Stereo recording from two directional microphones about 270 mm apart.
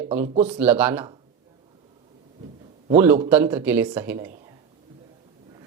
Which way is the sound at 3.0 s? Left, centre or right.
Centre.